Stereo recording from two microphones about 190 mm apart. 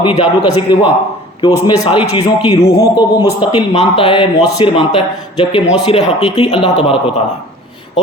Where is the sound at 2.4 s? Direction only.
30° left (ahead or behind).